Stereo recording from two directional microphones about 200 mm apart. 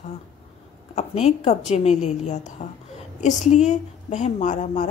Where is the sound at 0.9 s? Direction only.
30° left (ahead or behind).